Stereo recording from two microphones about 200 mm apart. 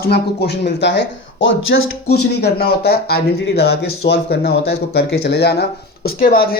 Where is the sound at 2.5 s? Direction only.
50° left (ahead or behind).